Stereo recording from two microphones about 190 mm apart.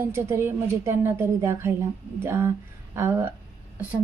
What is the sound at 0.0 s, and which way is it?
A woman's voice, 15° right (ahead or behind).